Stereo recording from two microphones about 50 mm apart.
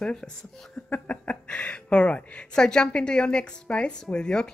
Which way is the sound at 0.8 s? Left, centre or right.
Left.